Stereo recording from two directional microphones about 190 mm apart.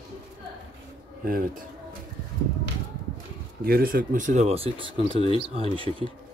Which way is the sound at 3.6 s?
50° right (ahead or behind).